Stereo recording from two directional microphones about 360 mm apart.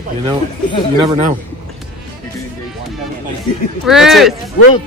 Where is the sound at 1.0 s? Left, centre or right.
Centre.